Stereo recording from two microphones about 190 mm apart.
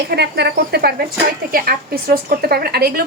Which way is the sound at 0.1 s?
60° right (ahead or behind).